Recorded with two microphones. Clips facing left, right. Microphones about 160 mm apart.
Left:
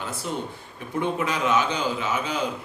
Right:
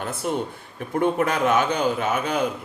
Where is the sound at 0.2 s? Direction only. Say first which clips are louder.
Right 7 dB; 55° right (ahead or behind).